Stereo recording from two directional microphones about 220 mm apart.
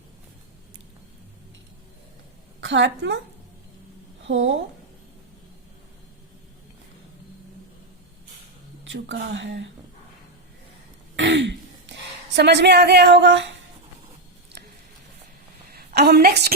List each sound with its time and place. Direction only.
2.6 s a woman's voice: 55° right (ahead or behind)
4.3 s speech: 55° right (ahead or behind)
8.8 s speech: 55° right (ahead or behind)
11.2 s throat clearing: 55° right (ahead or behind)
15.7 s a woman's voice: 45° right (ahead or behind)